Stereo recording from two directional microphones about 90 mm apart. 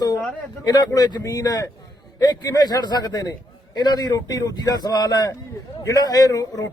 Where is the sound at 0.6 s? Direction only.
50° left (ahead or behind).